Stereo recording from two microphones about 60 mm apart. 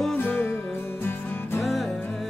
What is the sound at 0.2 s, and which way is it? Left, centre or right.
Music, left.